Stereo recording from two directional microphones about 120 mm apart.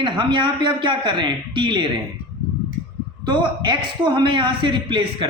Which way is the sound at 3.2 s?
40° right (ahead or behind).